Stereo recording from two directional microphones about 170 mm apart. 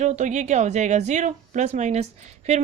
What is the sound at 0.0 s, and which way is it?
Speech, 45° right (ahead or behind).